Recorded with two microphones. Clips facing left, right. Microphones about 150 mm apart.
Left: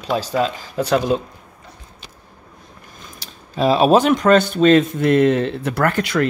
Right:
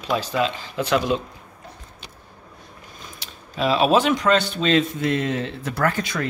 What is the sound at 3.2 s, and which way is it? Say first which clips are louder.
Speech: left 5 dB; 40° left (ahead or behind).